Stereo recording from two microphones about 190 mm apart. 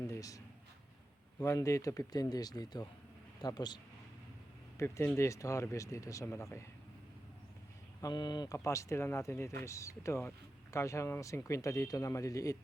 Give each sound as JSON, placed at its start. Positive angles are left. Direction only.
{"t": 0.1, "sound": "a sound", "side_deg": 15}
{"t": 1.4, "sound": "speech", "side_deg": 15}
{"t": 4.8, "sound": "speech", "side_deg": 15}
{"t": 8.0, "sound": "speech", "side_deg": 25}